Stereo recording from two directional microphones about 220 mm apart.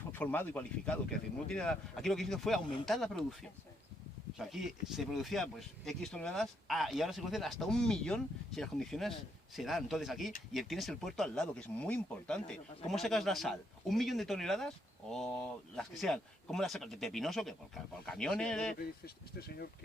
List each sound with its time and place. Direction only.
0.1 s speech: 10° left (ahead or behind)
4.4 s speech: centre (ahead or behind)
15.7 s speech: centre (ahead or behind)
18.8 s speech: 45° left (ahead or behind)